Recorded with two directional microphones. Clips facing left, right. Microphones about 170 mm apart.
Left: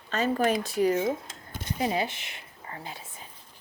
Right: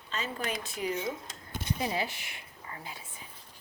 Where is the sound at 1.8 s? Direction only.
25° left (ahead or behind).